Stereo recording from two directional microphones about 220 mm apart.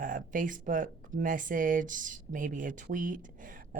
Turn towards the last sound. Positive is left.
turn(degrees=-35)  # may be behind; listen again after turning